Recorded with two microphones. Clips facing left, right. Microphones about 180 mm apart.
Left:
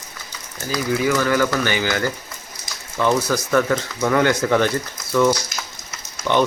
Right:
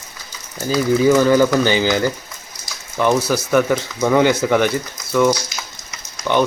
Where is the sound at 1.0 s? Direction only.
20° right (ahead or behind).